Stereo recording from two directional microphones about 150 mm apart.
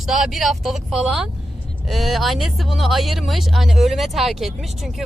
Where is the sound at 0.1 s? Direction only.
Centre (ahead or behind).